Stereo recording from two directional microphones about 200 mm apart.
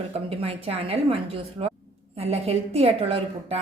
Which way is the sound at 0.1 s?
30° right (ahead or behind).